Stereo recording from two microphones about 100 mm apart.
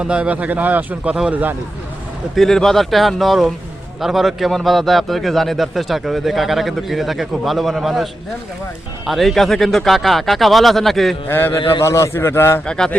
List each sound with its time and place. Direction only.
0.0 s a man's voice: 10° right (ahead or behind)
1.1 s a man's voice: 5° right (ahead or behind)
9.0 s a man's voice: centre (ahead or behind)
11.3 s a man's voice: 20° left (ahead or behind)
12.6 s speech: 10° left (ahead or behind)